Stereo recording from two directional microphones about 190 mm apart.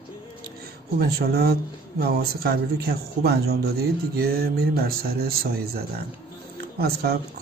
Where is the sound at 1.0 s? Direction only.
55° right (ahead or behind).